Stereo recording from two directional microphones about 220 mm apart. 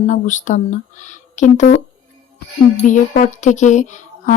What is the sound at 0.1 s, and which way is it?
A woman's voice, 35° left (ahead or behind).